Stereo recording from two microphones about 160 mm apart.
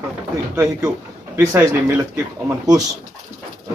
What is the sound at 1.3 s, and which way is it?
A man's voice, 15° right (ahead or behind).